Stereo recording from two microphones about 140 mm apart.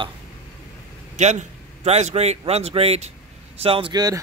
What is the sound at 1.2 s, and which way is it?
A man's voice, 55° right (ahead or behind).